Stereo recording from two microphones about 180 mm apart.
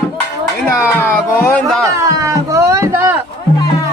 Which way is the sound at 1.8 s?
15° right (ahead or behind).